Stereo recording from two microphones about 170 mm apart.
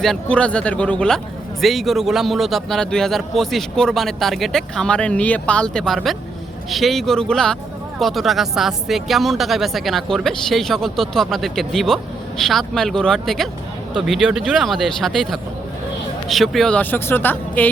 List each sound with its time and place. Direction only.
0.0 s speech: 5° left (ahead or behind)